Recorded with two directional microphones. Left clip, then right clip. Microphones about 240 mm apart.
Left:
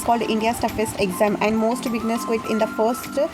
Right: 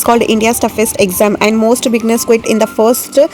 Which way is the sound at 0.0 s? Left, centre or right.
Right.